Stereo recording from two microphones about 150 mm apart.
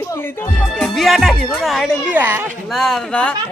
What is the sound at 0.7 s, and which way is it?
A man's voice, centre (ahead or behind).